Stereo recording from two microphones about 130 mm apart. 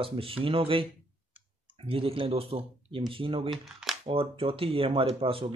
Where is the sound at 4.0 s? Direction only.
45° right (ahead or behind).